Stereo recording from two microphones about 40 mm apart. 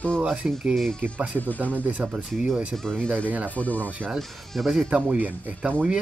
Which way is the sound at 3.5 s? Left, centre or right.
Left.